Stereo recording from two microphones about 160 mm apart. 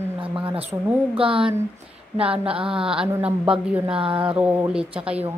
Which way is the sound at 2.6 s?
5° right (ahead or behind).